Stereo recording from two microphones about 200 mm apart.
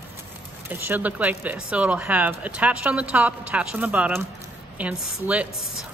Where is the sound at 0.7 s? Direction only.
10° right (ahead or behind).